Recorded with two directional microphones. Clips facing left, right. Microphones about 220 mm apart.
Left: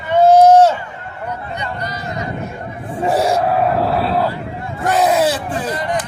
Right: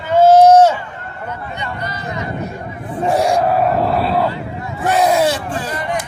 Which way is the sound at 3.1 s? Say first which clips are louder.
Right 1 dB; 5° left (ahead or behind).